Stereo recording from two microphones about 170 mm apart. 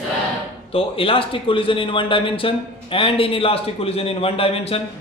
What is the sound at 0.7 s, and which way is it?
A man's voice, 30° left (ahead or behind).